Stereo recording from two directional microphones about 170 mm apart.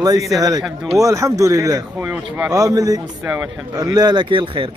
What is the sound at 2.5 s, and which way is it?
Speech, 20° right (ahead or behind).